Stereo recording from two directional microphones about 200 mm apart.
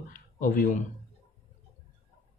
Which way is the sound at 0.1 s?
40° left (ahead or behind).